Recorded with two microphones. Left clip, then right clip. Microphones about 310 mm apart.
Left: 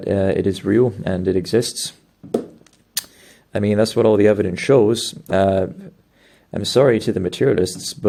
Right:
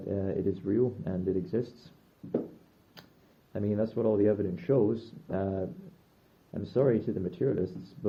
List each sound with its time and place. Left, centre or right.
0.1 s speech: left
3.5 s speech: left